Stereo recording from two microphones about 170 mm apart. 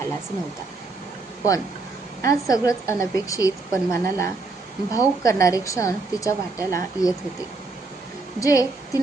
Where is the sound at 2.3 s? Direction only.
20° left (ahead or behind).